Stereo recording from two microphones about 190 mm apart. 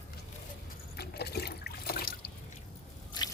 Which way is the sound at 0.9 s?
60° left (ahead or behind).